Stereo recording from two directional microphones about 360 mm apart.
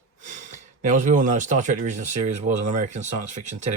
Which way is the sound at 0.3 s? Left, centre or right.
Right.